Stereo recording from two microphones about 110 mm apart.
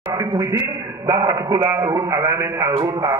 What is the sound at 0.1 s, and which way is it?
A man's voice, 35° right (ahead or behind).